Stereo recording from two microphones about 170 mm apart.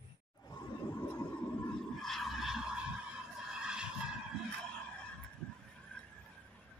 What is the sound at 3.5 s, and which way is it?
Skidding, 5° right (ahead or behind).